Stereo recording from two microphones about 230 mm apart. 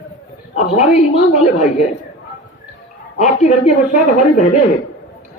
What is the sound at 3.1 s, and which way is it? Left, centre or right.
Speech, left.